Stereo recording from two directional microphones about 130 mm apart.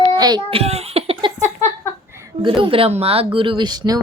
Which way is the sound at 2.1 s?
20° right (ahead or behind).